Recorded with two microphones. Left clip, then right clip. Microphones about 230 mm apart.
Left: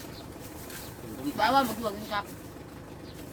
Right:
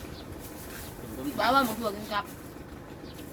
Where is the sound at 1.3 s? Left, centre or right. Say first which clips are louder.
Even; centre.